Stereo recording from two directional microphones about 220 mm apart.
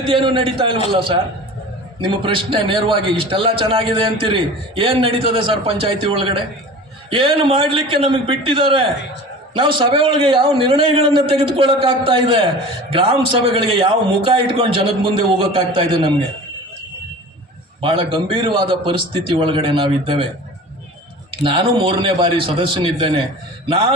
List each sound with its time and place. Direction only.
0.0 s a man's voice: 25° right (ahead or behind)
2.2 s a man's voice: 20° right (ahead or behind)
17.7 s a man's voice: 25° right (ahead or behind)
21.4 s a man's voice: 25° right (ahead or behind)